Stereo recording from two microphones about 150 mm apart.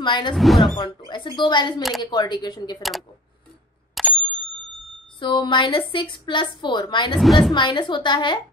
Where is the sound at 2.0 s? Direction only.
30° left (ahead or behind).